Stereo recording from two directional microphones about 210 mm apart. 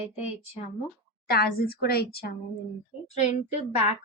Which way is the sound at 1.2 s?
45° left (ahead or behind).